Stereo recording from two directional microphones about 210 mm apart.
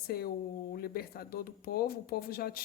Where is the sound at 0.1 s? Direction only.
45° left (ahead or behind).